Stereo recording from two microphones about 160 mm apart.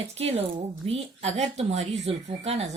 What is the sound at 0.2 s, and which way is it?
Speech, 40° right (ahead or behind).